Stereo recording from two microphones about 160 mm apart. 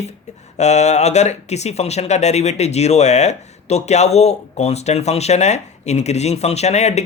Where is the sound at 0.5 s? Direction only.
45° left (ahead or behind).